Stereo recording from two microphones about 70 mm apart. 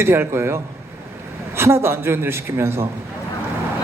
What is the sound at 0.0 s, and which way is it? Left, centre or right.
A man's voice, right.